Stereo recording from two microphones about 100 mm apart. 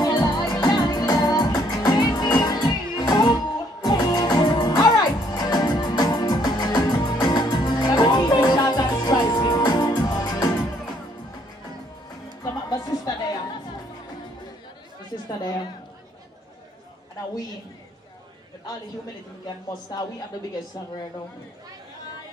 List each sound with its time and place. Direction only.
0.0 s music: 45° left (ahead or behind)
12.4 s music: 40° left (ahead or behind)
19.4 s a sound: 45° left (ahead or behind)